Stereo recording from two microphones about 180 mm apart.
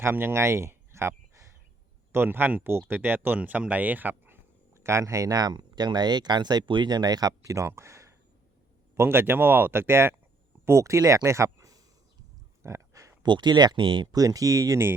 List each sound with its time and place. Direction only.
0.0 s speech: 15° right (ahead or behind)
2.1 s speech: 10° right (ahead or behind)